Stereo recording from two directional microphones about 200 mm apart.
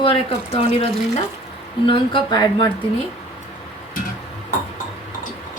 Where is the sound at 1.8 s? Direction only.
25° left (ahead or behind).